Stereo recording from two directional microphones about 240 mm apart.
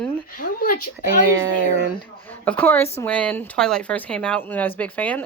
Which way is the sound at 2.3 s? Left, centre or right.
Centre.